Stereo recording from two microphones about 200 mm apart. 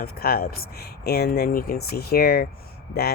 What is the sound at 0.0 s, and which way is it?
Speech, 50° left (ahead or behind).